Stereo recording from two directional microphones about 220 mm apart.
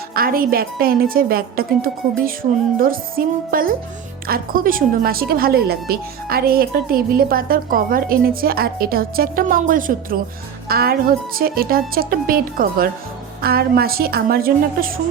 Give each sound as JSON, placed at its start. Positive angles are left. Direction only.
{"t": 0.1, "sound": "a woman's voice", "side_deg": -40}